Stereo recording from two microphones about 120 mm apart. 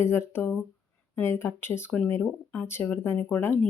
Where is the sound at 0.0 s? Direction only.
20° left (ahead or behind).